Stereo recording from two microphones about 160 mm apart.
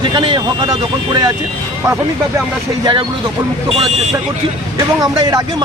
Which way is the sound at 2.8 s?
30° right (ahead or behind).